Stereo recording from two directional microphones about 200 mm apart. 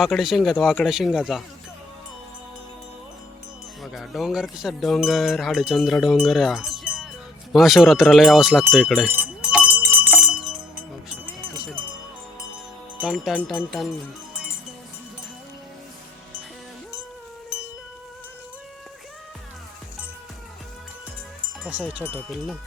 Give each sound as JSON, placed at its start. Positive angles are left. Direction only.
{"t": 0.0, "sound": "speech", "side_deg": 0}
{"t": 3.8, "sound": "speech", "side_deg": 0}
{"t": 9.1, "sound": "a sound", "side_deg": -5}
{"t": 13.0, "sound": "speech", "side_deg": 0}
{"t": 21.6, "sound": "speech", "side_deg": -5}
{"t": 22.0, "sound": "speech", "side_deg": 5}